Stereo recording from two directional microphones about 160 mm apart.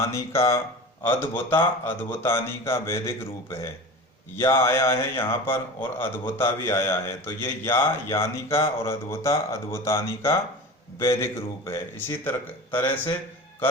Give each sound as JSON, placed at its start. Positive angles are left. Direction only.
{"t": 0.0, "sound": "a man's voice", "side_deg": 20}